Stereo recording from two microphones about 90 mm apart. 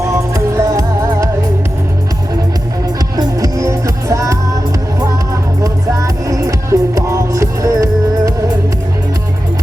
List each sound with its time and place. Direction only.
0.0 s music: 35° right (ahead or behind)
3.2 s music: 40° right (ahead or behind)
5.6 s music: 40° right (ahead or behind)